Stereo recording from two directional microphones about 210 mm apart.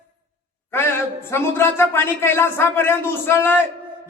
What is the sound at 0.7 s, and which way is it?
A man's voice, 10° left (ahead or behind).